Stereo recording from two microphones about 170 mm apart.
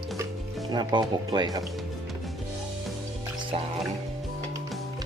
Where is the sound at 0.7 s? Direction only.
25° right (ahead or behind).